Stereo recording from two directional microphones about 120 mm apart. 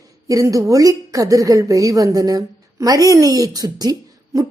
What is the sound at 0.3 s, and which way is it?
A woman's voice, 30° right (ahead or behind).